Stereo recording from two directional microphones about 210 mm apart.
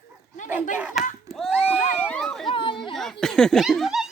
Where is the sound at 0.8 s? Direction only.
5° right (ahead or behind).